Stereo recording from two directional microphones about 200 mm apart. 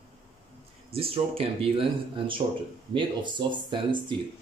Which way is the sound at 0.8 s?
30° right (ahead or behind).